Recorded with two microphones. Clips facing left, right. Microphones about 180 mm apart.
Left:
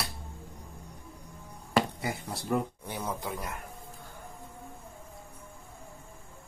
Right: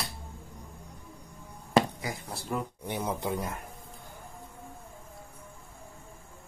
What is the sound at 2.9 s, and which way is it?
Speech, 20° right (ahead or behind).